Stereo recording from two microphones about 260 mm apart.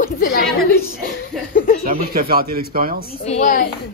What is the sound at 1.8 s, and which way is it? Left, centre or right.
Speech, right.